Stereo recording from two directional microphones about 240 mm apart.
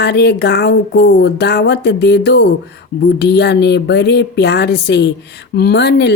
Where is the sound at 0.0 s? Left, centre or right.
Left.